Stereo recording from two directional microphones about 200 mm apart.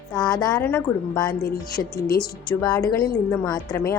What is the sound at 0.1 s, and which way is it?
A woman's voice, 20° left (ahead or behind).